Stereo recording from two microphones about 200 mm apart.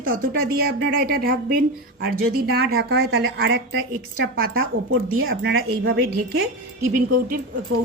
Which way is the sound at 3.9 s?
50° right (ahead or behind).